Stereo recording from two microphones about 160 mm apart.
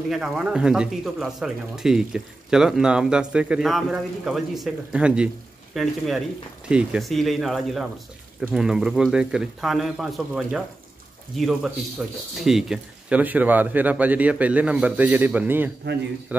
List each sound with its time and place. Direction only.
0.1 s speech: 5° right (ahead or behind)